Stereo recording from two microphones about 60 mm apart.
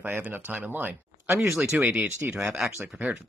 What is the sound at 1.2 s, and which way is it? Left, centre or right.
Speech, right.